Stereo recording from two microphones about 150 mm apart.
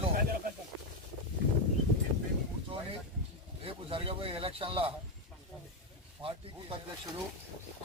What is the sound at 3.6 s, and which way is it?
Speech, 35° right (ahead or behind).